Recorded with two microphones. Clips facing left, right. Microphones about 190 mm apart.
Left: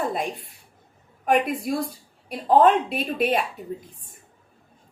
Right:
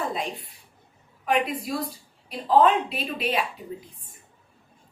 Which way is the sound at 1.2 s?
50° left (ahead or behind).